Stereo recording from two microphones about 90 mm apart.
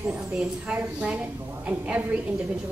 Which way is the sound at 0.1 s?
10° right (ahead or behind).